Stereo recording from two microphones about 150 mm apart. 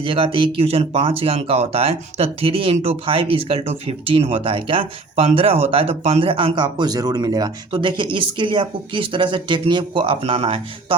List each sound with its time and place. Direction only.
0.0 s speech: 35° right (ahead or behind)